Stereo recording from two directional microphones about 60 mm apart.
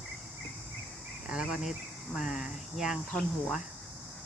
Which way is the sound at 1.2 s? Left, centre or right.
Centre.